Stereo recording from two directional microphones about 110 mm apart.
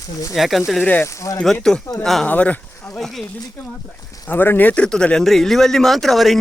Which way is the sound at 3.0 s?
Centre (ahead or behind).